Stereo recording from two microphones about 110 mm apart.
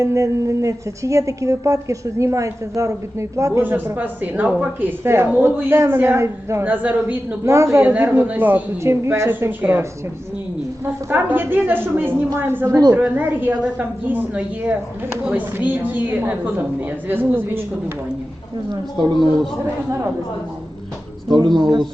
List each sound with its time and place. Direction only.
0.0 s a woman's voice: 30° right (ahead or behind)
7.4 s a woman's voice: 25° right (ahead or behind)
10.8 s a woman's voice: 20° right (ahead or behind)
21.2 s speech: 45° right (ahead or behind)